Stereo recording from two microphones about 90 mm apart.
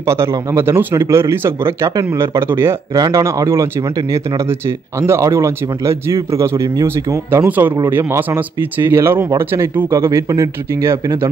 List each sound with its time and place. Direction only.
0.0 s speech: 30° right (ahead or behind)
2.9 s speech: 45° right (ahead or behind)
7.4 s speech: 20° right (ahead or behind)
7.7 s speech: 30° right (ahead or behind)